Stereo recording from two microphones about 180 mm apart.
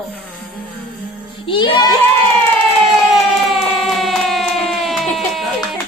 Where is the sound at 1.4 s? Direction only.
25° left (ahead or behind).